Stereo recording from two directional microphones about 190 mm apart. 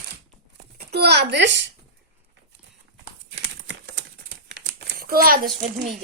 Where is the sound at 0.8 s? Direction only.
60° right (ahead or behind).